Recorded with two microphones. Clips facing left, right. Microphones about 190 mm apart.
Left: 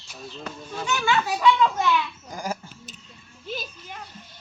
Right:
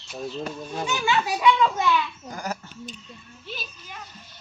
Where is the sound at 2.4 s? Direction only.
5° left (ahead or behind).